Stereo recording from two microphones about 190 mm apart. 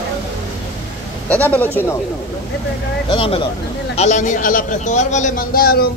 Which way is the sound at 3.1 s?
30° left (ahead or behind).